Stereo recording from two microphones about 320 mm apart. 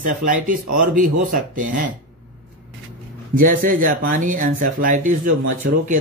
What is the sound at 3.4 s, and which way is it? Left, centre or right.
Speech, right.